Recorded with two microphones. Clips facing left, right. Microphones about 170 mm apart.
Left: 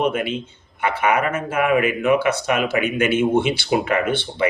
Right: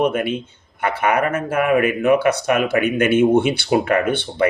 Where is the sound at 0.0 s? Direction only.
45° right (ahead or behind).